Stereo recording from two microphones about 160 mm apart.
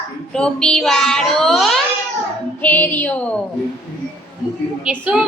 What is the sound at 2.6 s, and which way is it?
Child singing, 15° left (ahead or behind).